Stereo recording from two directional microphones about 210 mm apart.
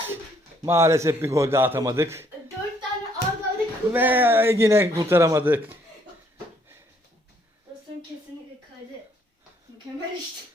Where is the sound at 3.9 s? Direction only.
10° right (ahead or behind).